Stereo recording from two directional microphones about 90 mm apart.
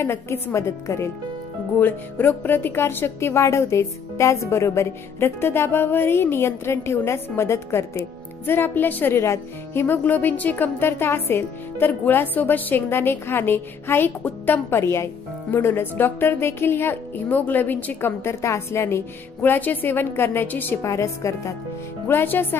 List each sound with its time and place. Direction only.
0.0 s a woman's voice: 30° left (ahead or behind)
1.8 s a woman's voice: 20° left (ahead or behind)
20.8 s speech: 35° left (ahead or behind)
22.0 s a woman's voice: 25° left (ahead or behind)